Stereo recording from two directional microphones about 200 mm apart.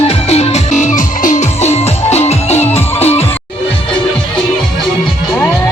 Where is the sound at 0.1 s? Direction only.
30° left (ahead or behind).